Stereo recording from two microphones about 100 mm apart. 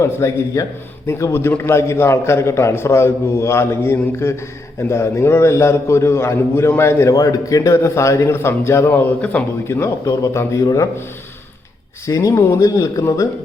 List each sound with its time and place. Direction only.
0.0 s a man's voice: 30° left (ahead or behind)
12.0 s speech: 35° left (ahead or behind)